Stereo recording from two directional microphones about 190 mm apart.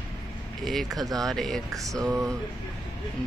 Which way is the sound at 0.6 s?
Centre (ahead or behind).